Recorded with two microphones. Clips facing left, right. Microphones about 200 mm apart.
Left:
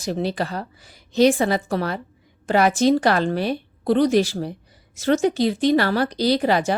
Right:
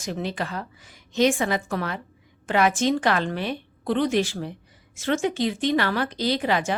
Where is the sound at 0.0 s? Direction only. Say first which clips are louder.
Left 5 dB; 35° left (ahead or behind).